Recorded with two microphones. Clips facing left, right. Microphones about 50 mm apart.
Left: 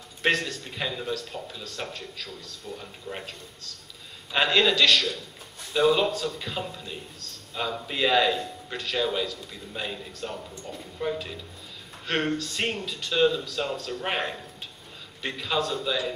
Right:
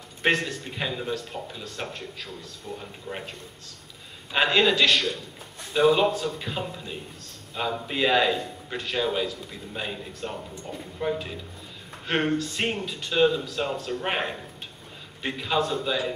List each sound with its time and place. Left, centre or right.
0.3 s a man's voice: centre
2.8 s a man's voice: centre
4.3 s a man's voice: centre
11.1 s a man's voice: centre